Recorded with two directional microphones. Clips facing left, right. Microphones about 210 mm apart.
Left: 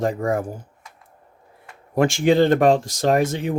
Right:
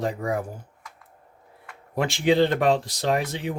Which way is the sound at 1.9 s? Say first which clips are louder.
Left 4 dB; 45° left (ahead or behind).